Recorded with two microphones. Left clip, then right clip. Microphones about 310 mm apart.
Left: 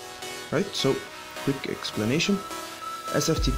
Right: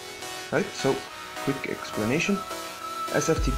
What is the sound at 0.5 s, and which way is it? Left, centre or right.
Speech, left.